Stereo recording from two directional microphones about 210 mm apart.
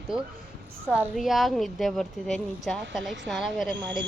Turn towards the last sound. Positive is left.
turn(degrees=0)  # may be behind; listen again after turning